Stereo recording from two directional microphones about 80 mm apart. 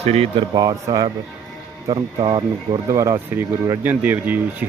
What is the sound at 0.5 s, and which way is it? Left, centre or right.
Speech, right.